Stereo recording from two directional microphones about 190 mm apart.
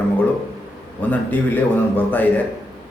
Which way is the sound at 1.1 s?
10° left (ahead or behind).